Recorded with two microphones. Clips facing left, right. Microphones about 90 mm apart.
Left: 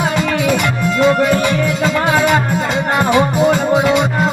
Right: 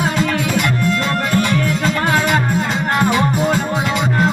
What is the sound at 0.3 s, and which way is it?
Music, 5° left (ahead or behind).